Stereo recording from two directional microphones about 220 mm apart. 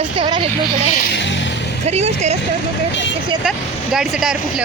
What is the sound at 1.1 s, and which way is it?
Vehicle, 50° left (ahead or behind).